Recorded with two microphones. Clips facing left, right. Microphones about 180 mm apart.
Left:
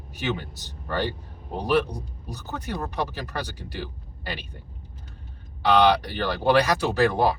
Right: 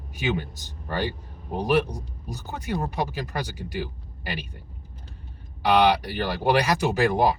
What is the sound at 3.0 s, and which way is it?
Speech, 10° right (ahead or behind).